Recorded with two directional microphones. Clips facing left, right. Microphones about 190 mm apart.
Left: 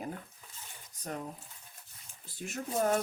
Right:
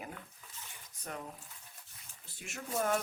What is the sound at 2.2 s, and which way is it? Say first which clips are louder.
Speech: left 7 dB; 40° left (ahead or behind).